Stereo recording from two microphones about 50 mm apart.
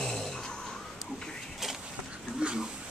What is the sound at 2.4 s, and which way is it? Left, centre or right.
Dog, right.